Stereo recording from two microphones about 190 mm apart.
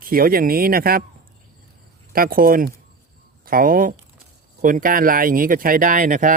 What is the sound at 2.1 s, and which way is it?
Speech, 50° right (ahead or behind).